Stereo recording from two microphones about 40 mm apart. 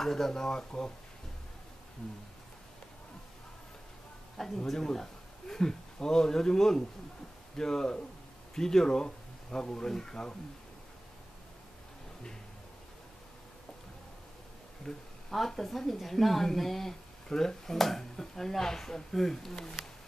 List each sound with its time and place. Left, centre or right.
0.0 s speech: centre
4.6 s speech: centre
14.9 s speech: centre